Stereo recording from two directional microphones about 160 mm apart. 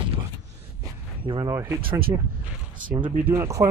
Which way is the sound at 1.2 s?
30° right (ahead or behind).